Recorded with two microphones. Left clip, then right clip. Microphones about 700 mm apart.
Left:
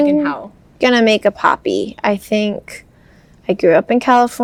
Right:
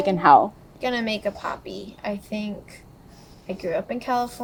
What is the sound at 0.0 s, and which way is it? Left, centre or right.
Speech, right.